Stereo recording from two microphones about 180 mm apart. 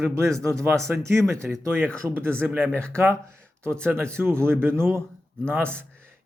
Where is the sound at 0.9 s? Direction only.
15° right (ahead or behind).